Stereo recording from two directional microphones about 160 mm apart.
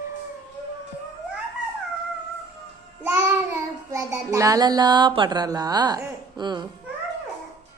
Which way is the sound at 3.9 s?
20° right (ahead or behind).